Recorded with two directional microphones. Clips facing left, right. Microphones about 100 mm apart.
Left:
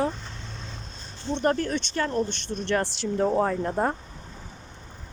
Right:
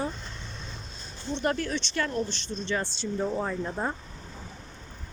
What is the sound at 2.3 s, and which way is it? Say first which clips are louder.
Speech: left 4 dB; 60° left (ahead or behind).